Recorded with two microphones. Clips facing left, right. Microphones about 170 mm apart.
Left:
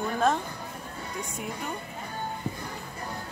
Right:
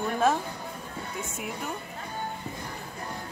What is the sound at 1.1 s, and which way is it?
Speech, 5° right (ahead or behind).